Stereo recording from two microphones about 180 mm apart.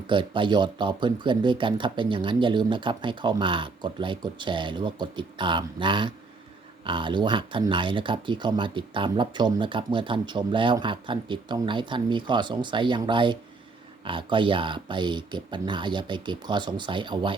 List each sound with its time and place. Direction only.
0.1 s speech: 25° right (ahead or behind)